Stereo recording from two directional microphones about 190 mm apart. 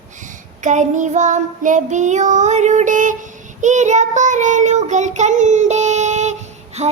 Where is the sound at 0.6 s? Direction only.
40° right (ahead or behind).